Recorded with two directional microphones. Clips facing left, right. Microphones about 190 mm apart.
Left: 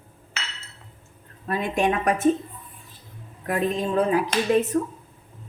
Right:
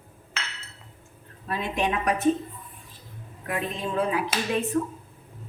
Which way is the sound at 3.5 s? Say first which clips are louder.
Left 6 dB; 40° left (ahead or behind).